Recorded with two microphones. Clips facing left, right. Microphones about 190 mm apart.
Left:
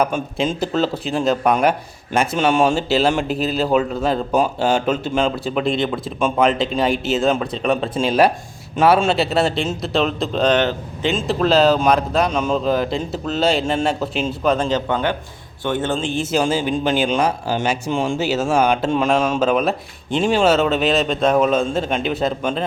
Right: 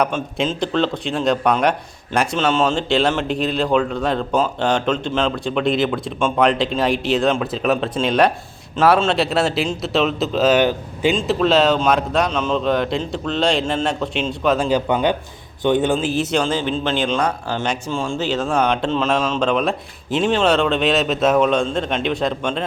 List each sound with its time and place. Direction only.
0.0 s speech: 5° left (ahead or behind); by 11.1 s 10° right (ahead or behind)
11.2 s a man's voice: centre (ahead or behind); by 16.0 s 15° right (ahead or behind)
16.0 s speech: 5° right (ahead or behind)
16.4 s speech: 10° left (ahead or behind)